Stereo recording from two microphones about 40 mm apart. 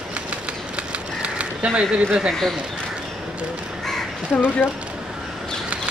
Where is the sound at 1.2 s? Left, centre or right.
Right.